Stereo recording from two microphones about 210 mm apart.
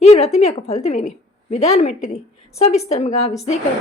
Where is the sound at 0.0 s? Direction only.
30° left (ahead or behind).